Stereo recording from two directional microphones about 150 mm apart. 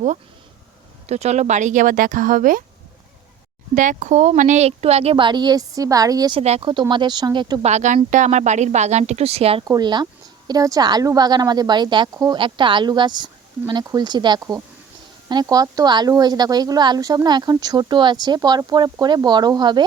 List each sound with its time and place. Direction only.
1.0 s speech: 45° right (ahead or behind); by 2.6 s 65° right (ahead or behind)
3.8 s a woman's voice: 55° right (ahead or behind); by 6.3 s 25° right (ahead or behind)
6.3 s speech: 40° right (ahead or behind)
7.6 s a woman's voice: 50° right (ahead or behind)
9.6 s a woman's voice: 30° right (ahead or behind)